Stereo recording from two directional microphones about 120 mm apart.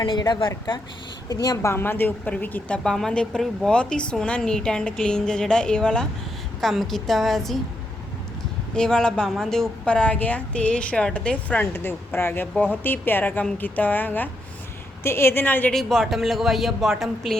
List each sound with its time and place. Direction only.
0.0 s a woman's voice: 40° left (ahead or behind)
1.7 s a woman's voice: 20° left (ahead or behind); by 7.6 s centre (ahead or behind)
8.7 s a woman's voice: 5° left (ahead or behind)
15.7 s speech: 5° left (ahead or behind)